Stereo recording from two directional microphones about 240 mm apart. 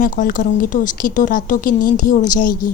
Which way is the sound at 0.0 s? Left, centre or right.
Left.